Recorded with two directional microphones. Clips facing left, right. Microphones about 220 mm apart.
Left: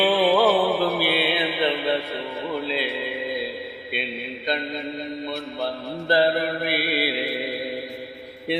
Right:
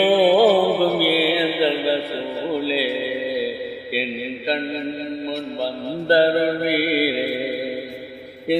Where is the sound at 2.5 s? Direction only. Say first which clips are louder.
Right 5 dB; 35° right (ahead or behind).